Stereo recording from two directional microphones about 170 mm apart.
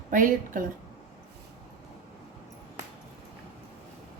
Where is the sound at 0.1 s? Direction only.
50° right (ahead or behind).